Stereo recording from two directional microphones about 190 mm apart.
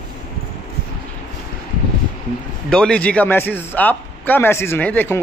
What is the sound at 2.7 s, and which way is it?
A man's voice, 5° left (ahead or behind).